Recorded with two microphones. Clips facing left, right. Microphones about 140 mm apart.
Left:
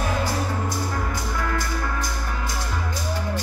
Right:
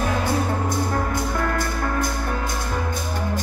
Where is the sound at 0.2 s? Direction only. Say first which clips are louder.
Right 3 dB; 55° right (ahead or behind).